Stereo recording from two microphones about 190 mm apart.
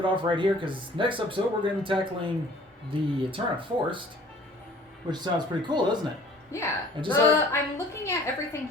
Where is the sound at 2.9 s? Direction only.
25° right (ahead or behind).